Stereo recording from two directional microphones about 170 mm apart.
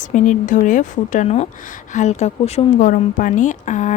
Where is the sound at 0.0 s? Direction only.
45° left (ahead or behind).